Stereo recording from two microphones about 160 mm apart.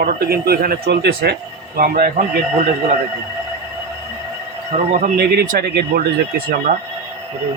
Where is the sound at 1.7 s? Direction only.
65° right (ahead or behind).